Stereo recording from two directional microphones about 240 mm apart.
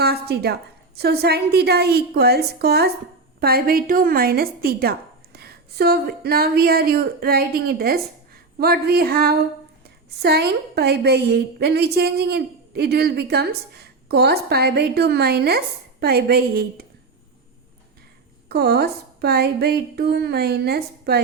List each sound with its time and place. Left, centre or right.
0.0 s a sound: right
0.9 s a woman's voice: right
18.4 s a woman's voice: right